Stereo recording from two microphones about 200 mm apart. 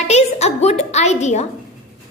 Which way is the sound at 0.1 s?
35° left (ahead or behind).